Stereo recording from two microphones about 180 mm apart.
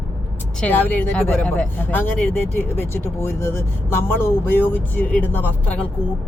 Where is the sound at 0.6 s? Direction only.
10° left (ahead or behind).